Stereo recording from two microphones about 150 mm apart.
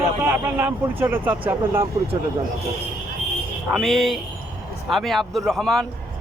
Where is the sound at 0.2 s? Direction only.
15° right (ahead or behind).